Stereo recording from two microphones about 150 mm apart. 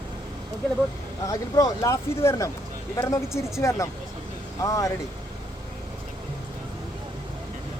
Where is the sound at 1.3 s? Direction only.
20° left (ahead or behind).